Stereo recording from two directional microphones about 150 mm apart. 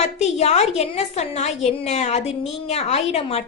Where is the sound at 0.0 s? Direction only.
45° left (ahead or behind).